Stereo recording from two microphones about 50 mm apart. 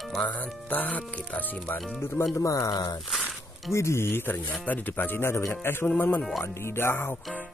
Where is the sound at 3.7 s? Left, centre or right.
Left.